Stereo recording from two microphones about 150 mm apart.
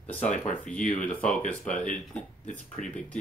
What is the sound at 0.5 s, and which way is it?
Speech, 10° left (ahead or behind).